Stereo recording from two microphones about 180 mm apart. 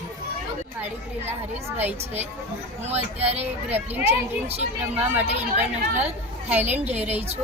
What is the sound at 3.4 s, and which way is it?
Speech, 10° right (ahead or behind).